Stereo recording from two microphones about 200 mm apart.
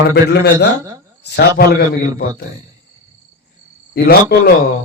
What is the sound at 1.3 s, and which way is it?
A man's voice, 50° left (ahead or behind).